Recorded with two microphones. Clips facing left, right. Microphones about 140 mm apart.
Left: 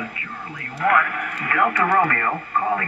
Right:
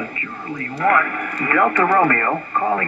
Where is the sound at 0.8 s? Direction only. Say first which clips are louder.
Right 2 dB; 40° right (ahead or behind).